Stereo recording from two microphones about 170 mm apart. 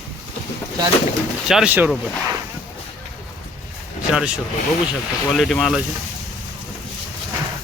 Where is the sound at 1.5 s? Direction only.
5° right (ahead or behind).